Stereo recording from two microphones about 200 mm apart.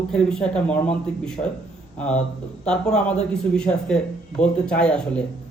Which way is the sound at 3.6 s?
5° left (ahead or behind).